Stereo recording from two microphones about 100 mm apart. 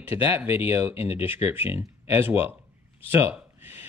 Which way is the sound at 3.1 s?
20° right (ahead or behind).